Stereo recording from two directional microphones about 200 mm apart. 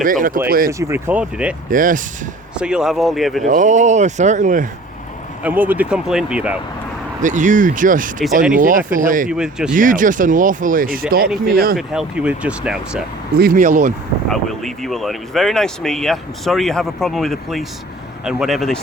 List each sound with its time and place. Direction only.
0.0 s speech: 45° right (ahead or behind)
0.7 s speech: 15° right (ahead or behind)
1.7 s speech: 40° right (ahead or behind)
2.6 s speech: 5° right (ahead or behind)
3.4 s speech: 40° right (ahead or behind)
5.4 s speech: 10° right (ahead or behind)
7.2 s speech: 40° right (ahead or behind)
9.3 s speech: 5° right (ahead or behind)
9.7 s speech: 40° right (ahead or behind)
11.8 s speech: 5° right (ahead or behind)
13.3 s speech: 45° right (ahead or behind)
14.3 s speech: centre (ahead or behind)